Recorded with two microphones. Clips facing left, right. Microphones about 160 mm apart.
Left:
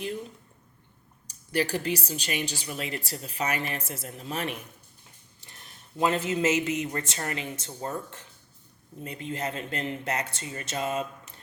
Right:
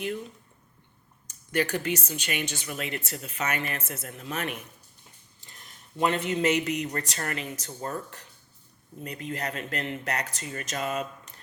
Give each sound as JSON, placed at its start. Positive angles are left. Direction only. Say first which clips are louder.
{"t": 1.3, "sound": "speech", "louder": "even", "side_deg": 35}